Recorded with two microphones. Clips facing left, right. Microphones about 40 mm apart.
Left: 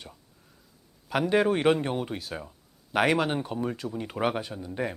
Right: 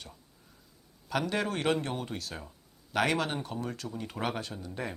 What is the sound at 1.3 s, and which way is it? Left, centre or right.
Speech, centre.